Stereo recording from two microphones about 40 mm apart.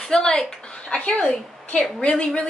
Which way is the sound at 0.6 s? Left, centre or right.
Left.